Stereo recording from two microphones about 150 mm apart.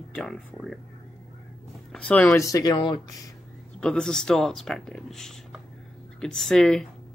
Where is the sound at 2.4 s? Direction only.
20° left (ahead or behind).